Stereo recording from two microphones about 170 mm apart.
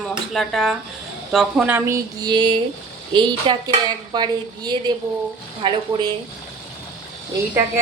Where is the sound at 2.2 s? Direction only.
25° right (ahead or behind).